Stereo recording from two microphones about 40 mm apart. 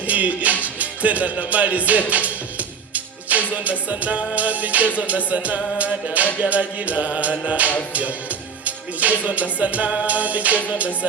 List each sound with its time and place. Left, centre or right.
0.1 s music: right